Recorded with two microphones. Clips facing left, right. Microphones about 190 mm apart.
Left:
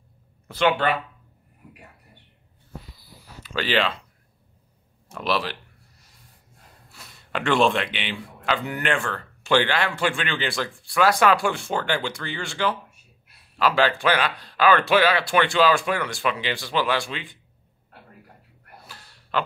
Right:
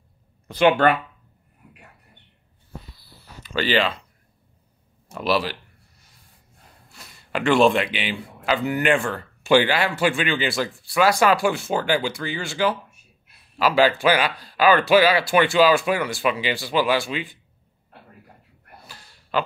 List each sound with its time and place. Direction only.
0.8 s speech: 50° right (ahead or behind)
3.4 s speech: centre (ahead or behind)
5.1 s speech: 5° right (ahead or behind)
6.9 s speech: centre (ahead or behind)
18.9 s gasp: centre (ahead or behind)